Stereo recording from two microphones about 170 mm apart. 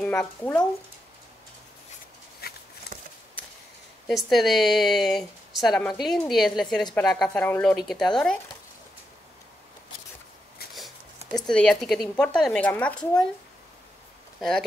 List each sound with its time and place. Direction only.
0.0 s speech: 5° left (ahead or behind)
2.4 s a sound: 65° left (ahead or behind)
4.1 s a woman's voice: centre (ahead or behind)
11.3 s a woman's voice: 5° left (ahead or behind)